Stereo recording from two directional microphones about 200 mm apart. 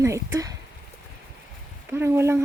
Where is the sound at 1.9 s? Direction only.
10° right (ahead or behind).